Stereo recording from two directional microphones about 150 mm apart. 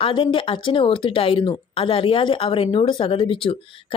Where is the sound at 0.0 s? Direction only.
35° left (ahead or behind).